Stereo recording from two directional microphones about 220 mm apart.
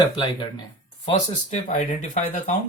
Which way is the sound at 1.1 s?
35° left (ahead or behind).